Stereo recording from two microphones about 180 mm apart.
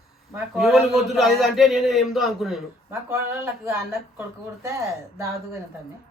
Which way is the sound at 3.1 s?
15° right (ahead or behind).